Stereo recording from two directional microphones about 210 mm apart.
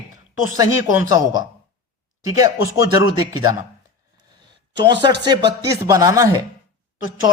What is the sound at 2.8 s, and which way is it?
Speech, 20° right (ahead or behind).